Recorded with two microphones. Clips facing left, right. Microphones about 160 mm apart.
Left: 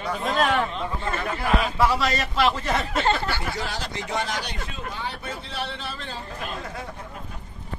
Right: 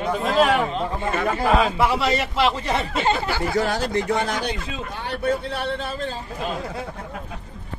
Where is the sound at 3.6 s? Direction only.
50° right (ahead or behind).